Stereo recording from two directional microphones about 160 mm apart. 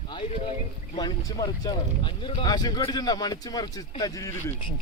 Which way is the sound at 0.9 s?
25° left (ahead or behind).